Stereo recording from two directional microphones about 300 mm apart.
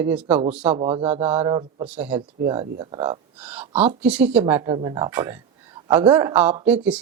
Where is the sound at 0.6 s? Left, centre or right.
Centre.